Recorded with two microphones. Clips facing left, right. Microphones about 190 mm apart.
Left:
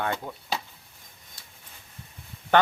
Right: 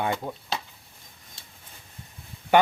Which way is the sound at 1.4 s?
25° right (ahead or behind).